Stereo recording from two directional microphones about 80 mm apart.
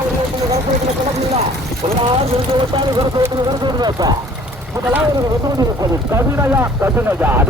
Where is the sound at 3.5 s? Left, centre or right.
Right.